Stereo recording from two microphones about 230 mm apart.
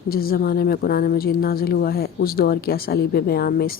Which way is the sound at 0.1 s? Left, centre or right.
Left.